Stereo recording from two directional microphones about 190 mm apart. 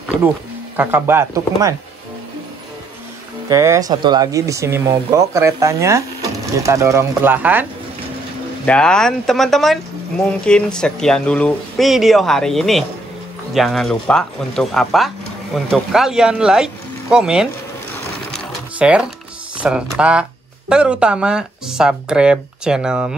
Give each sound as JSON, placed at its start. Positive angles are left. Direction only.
{"t": 0.7, "sound": "speech", "side_deg": -10}
{"t": 3.4, "sound": "speech", "side_deg": -15}
{"t": 8.6, "sound": "speech", "side_deg": 5}
{"t": 18.8, "sound": "speech", "side_deg": -5}